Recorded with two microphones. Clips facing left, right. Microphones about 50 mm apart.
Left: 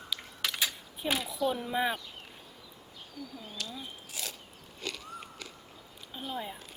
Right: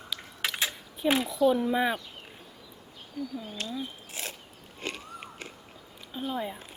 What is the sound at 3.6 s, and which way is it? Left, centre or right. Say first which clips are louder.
Zipper: right 4 dB; right.